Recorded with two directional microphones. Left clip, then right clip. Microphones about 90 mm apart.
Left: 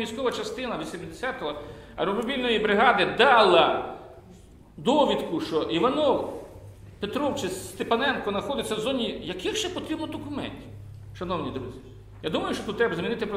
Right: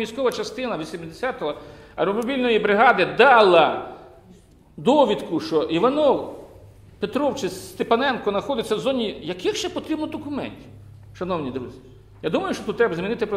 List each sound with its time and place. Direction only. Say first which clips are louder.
0.1 s a man's voice: right 5 dB; 65° right (ahead or behind)
4.8 s a man's voice: right 4 dB; 55° right (ahead or behind)
7.0 s a man's voice: right 5 dB; 55° right (ahead or behind)